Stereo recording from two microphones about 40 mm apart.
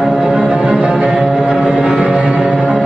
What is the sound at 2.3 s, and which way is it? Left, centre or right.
Music, centre.